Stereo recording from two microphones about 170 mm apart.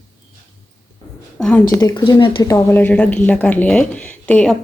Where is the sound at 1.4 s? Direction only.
5° left (ahead or behind).